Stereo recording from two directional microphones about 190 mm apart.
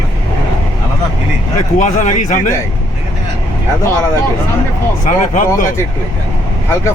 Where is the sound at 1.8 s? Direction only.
40° left (ahead or behind).